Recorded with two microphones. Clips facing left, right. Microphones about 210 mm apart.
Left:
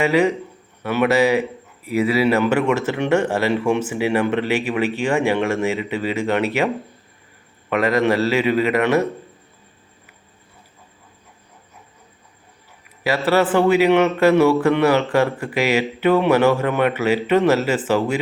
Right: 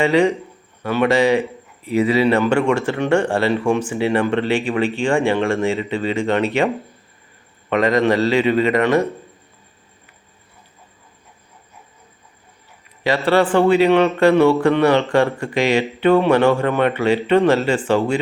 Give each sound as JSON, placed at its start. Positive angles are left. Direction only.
{"t": 0.0, "sound": "speech", "side_deg": 5}
{"t": 2.8, "sound": "speech", "side_deg": 15}
{"t": 7.7, "sound": "speech", "side_deg": 5}
{"t": 13.0, "sound": "speech", "side_deg": 5}